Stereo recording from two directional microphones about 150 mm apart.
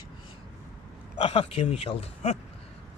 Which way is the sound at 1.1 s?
40° left (ahead or behind).